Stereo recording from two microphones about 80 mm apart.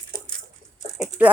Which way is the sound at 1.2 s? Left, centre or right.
Centre.